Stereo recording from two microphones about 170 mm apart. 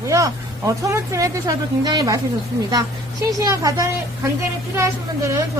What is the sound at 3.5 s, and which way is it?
A woman's voice, 20° right (ahead or behind).